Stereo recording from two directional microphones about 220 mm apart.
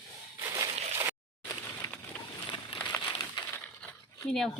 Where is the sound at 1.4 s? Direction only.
15° left (ahead or behind).